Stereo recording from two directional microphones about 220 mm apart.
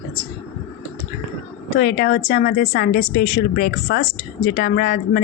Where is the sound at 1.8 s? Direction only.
45° left (ahead or behind).